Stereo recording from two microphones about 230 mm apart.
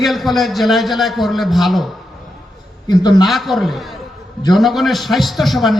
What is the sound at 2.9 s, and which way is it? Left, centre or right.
Speech, centre.